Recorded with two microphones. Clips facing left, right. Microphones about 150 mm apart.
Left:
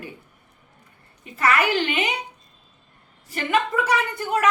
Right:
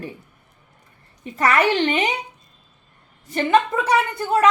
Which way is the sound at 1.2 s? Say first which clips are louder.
Right 3 dB; 30° right (ahead or behind).